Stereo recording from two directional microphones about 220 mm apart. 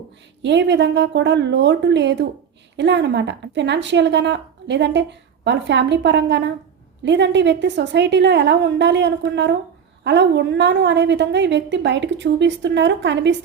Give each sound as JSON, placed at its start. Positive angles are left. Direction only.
{"t": 0.4, "sound": "a woman's voice", "side_deg": -50}